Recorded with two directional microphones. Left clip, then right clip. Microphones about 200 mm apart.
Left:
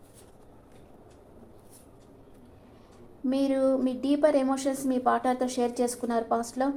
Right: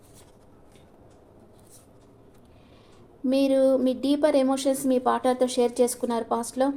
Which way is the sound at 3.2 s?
15° right (ahead or behind).